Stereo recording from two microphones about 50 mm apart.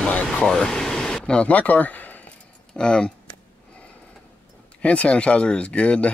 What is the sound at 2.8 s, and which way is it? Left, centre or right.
Speech, centre.